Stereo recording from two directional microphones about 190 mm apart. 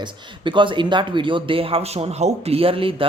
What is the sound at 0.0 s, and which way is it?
Speech, 25° right (ahead or behind).